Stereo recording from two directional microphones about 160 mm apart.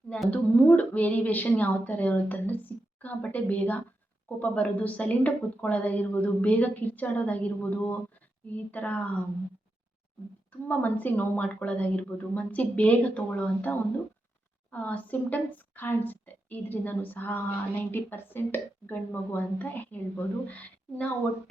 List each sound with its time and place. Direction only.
0.1 s a woman's voice: 10° left (ahead or behind)
10.7 s a woman's voice: 10° left (ahead or behind)